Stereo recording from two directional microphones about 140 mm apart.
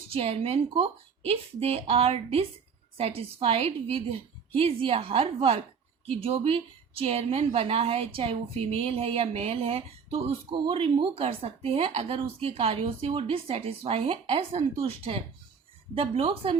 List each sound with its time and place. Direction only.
0.1 s a woman's voice: 45° right (ahead or behind)